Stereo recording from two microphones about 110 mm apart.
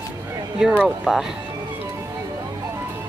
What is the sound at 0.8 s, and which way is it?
Speech, 5° right (ahead or behind).